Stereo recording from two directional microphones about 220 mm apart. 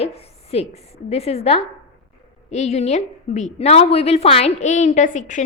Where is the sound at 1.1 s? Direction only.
30° left (ahead or behind).